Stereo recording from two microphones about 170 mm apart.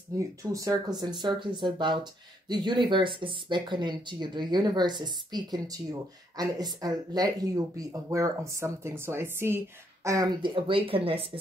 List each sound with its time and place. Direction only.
0.4 s speech: 20° right (ahead or behind)